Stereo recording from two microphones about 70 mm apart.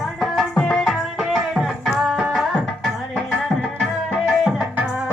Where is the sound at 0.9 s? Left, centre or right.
Centre.